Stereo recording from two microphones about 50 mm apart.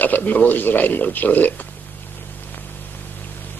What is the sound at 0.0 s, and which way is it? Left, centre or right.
A man's voice, left.